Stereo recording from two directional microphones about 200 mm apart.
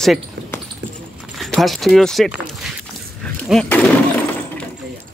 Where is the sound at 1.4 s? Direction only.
Centre (ahead or behind).